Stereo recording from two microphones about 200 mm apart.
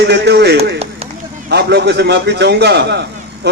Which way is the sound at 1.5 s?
55° right (ahead or behind).